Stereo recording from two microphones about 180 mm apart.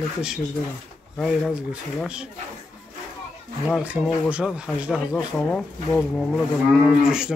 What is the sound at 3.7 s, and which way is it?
Speech, 5° right (ahead or behind).